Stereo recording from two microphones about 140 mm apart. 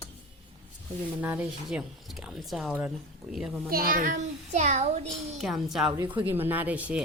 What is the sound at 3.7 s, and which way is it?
Speech, 90° right.